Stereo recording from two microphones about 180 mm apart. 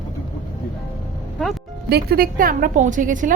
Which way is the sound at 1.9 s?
60° right (ahead or behind).